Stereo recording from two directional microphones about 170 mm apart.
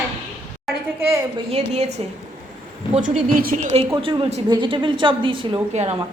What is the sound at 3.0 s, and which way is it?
Speech, 55° right (ahead or behind).